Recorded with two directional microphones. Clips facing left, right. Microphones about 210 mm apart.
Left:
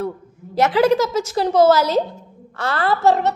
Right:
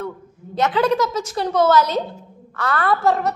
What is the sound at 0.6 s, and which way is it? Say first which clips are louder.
A woman's voice: left 3 dB; 30° left (ahead or behind).